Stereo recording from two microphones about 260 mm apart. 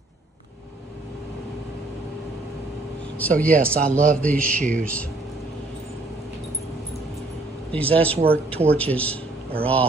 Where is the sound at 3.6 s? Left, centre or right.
Centre.